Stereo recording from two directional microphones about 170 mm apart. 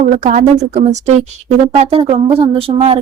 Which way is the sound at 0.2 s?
50° right (ahead or behind).